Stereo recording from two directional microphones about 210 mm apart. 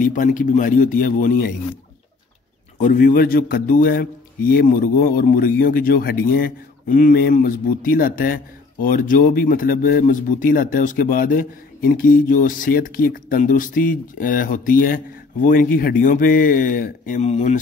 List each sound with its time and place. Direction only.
0.0 s speech: 40° left (ahead or behind)
2.8 s a man's voice: 40° left (ahead or behind)